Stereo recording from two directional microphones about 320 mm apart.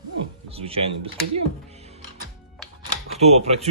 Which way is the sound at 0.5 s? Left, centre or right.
Centre.